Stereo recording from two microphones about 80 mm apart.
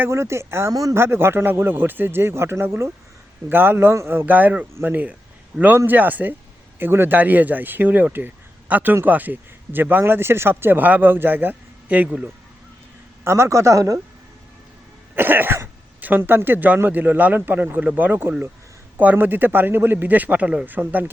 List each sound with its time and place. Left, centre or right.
0.0 s speech: right
0.7 s speech: right
0.9 s speech: right
13.2 s speech: right
15.1 s speech: right